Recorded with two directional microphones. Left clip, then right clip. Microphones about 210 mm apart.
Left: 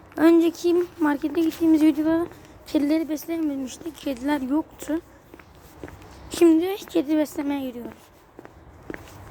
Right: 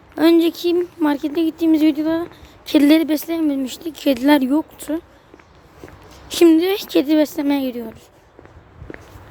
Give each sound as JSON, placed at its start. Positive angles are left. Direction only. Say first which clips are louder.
{"t": 0.2, "sound": "a woman's voice", "louder": "right 3 dB", "side_deg": -15}
{"t": 2.6, "sound": "speech", "louder": "right 9 dB", "side_deg": -35}
{"t": 6.2, "sound": "speech", "louder": "right 5 dB", "side_deg": -30}